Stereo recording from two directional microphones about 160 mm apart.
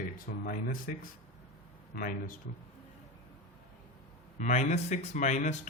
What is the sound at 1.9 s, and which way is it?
Speech, 60° left (ahead or behind).